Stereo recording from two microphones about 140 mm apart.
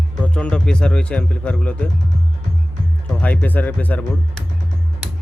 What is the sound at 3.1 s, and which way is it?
Speech, 10° left (ahead or behind).